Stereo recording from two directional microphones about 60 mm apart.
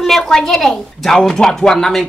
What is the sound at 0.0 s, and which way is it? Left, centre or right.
Speech, centre.